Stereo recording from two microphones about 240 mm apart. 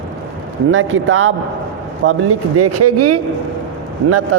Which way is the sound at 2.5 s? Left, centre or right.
Right.